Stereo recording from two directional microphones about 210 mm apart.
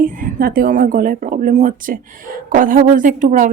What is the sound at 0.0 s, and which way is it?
Speech, 40° right (ahead or behind).